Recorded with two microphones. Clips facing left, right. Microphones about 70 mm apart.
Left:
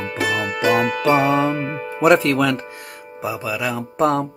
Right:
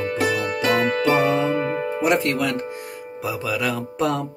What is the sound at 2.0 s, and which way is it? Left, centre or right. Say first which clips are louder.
Speech: left 7 dB; left.